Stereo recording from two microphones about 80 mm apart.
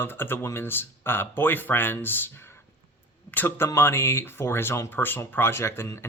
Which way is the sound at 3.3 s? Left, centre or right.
Left.